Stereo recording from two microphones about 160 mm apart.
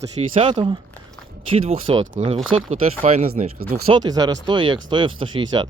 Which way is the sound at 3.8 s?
25° right (ahead or behind).